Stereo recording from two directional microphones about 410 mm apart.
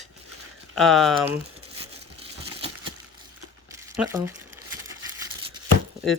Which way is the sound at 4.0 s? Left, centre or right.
Centre.